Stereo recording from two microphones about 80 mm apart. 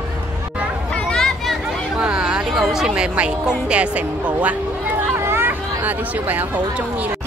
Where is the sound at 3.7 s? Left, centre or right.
Centre.